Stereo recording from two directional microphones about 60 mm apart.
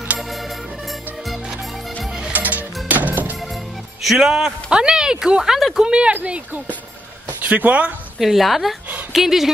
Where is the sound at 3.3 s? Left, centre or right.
Centre.